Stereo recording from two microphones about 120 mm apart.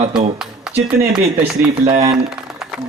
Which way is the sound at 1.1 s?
55° right (ahead or behind).